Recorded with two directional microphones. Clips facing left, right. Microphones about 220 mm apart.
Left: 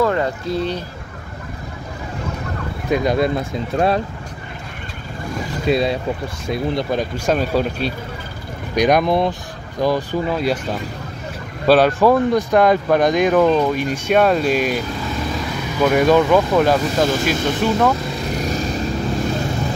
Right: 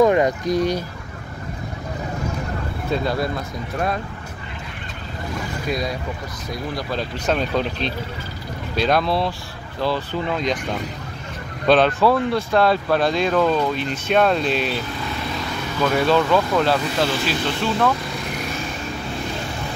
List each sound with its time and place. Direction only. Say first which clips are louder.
0.0 s speech: right 3 dB; 15° right (ahead or behind)
2.9 s speech: left 6 dB; 15° left (ahead or behind)
5.7 s speech: left 8 dB; 30° left (ahead or behind)
8.7 s speech: left 4 dB; 15° left (ahead or behind)
11.6 s speech: left 3 dB; 10° left (ahead or behind)
15.8 s speech: left 4 dB; 15° left (ahead or behind)
17.0 s speech: left 4 dB; 45° left (ahead or behind)
17.5 s speech: left 4 dB; 15° left (ahead or behind)